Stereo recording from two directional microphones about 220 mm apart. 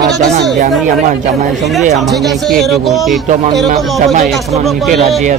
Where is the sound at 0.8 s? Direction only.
30° right (ahead or behind).